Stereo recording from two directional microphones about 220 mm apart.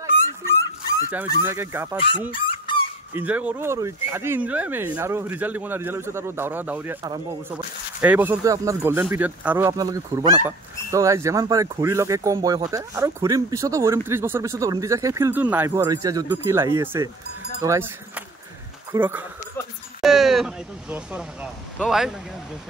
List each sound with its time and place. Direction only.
0.5 s dog: 10° left (ahead or behind)
1.1 s speech: 10° right (ahead or behind)
2.3 s honk: 25° left (ahead or behind)
3.2 s speech: 5° right (ahead or behind)